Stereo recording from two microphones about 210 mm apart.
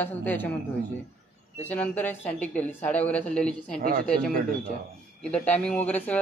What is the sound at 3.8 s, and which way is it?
Speech, 45° right (ahead or behind).